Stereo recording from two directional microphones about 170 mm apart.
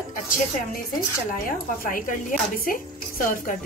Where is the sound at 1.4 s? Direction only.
55° left (ahead or behind).